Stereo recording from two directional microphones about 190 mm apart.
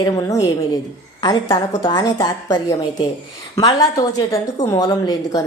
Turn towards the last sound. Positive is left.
turn(degrees=20)  # may be behind; listen again after turning